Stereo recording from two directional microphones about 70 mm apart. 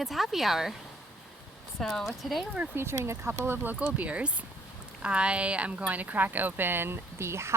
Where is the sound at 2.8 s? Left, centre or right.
Right.